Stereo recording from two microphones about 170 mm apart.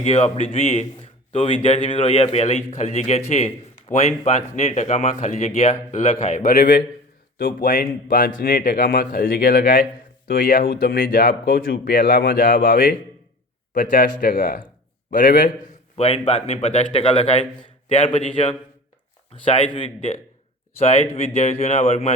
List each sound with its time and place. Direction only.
0.0 s a man's voice: 40° left (ahead or behind)
6.5 s speech: 55° left (ahead or behind)
14.2 s speech: 55° left (ahead or behind)
16.0 s a man's voice: 35° left (ahead or behind)